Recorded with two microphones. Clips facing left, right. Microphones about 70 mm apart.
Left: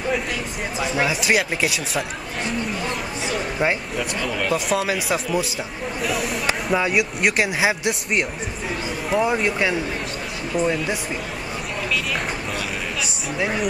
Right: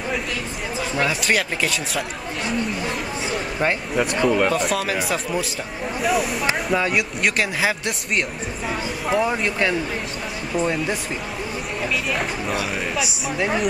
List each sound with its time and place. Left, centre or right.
0.7 s speech: centre
3.5 s speech: centre
4.2 s speech: right
4.5 s speech: centre
6.0 s speech: centre
12.1 s a sound: centre